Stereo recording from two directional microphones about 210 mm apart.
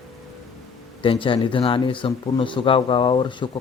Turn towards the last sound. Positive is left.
turn(degrees=20)  # may be behind; listen again after turning